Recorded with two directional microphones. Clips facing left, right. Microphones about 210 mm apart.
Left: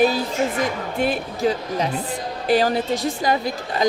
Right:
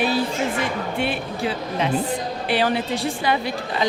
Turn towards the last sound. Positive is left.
turn(degrees=40)  # may be behind; listen again after turning